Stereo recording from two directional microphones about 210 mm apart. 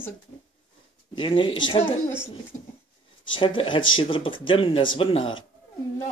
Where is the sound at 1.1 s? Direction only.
25° left (ahead or behind).